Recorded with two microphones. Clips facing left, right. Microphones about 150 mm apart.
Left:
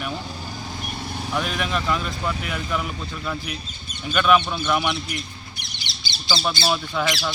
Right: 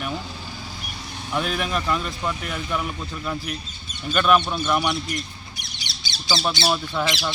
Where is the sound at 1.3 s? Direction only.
Centre (ahead or behind).